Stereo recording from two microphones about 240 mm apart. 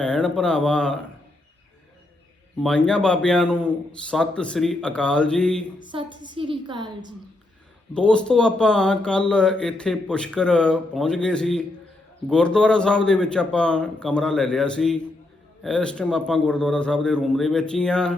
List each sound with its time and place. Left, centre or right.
0.0 s speech: centre
2.6 s speech: centre
5.8 s a woman's voice: centre
7.9 s speech: centre